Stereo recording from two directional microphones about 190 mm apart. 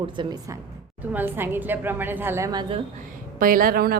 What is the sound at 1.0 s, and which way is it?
A woman's voice, 10° right (ahead or behind).